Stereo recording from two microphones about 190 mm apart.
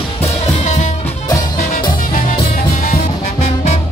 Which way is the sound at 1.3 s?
20° left (ahead or behind).